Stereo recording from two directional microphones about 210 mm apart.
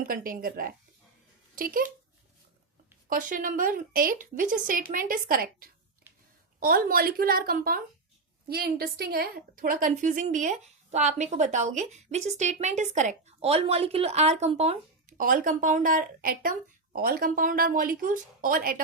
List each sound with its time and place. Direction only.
0.0 s a woman's voice: 40° right (ahead or behind)
3.1 s a woman's voice: 40° right (ahead or behind)
15.2 s a woman's voice: 40° right (ahead or behind)